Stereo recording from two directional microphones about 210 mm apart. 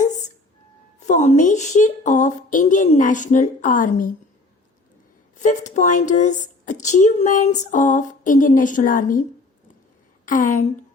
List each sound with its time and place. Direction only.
0.9 s a woman's voice: 35° left (ahead or behind)
5.4 s a woman's voice: 35° left (ahead or behind)
10.2 s a woman's voice: 40° left (ahead or behind)